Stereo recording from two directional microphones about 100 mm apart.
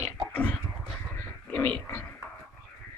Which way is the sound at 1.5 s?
20° left (ahead or behind).